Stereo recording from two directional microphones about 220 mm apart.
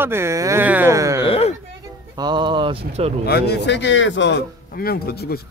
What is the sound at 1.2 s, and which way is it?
Speech, 25° left (ahead or behind).